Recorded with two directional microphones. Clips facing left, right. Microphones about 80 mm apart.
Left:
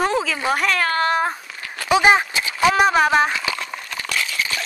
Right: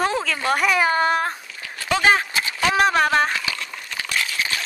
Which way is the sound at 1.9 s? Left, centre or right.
Centre.